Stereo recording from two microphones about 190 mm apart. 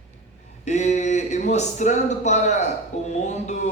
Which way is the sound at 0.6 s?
35° left (ahead or behind).